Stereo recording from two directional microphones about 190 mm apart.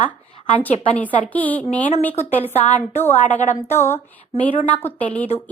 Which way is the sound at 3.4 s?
35° left (ahead or behind).